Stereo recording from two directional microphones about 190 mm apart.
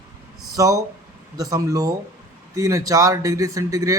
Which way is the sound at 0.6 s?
15° right (ahead or behind).